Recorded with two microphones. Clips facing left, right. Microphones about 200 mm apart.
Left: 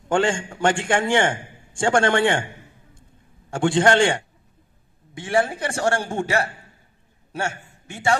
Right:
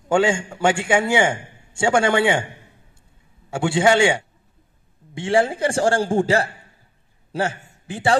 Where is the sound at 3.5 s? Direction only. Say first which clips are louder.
Even; 10° right (ahead or behind).